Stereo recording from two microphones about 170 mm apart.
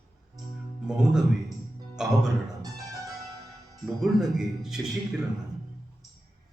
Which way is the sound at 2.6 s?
20° right (ahead or behind).